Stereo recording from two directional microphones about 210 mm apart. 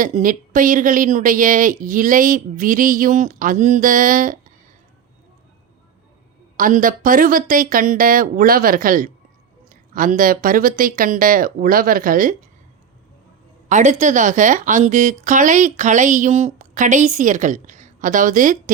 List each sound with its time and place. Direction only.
0.0 s a woman's voice: 40° right (ahead or behind)
6.6 s a woman's voice: 40° right (ahead or behind)
13.7 s a woman's voice: 35° right (ahead or behind)